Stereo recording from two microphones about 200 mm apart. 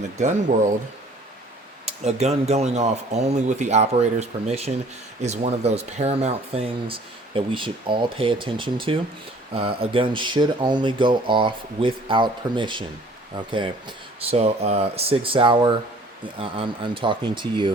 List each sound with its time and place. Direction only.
0.2 s speech: 35° right (ahead or behind)
1.8 s speech: 30° right (ahead or behind)